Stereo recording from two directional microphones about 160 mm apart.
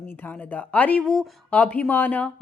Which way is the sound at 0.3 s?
10° left (ahead or behind).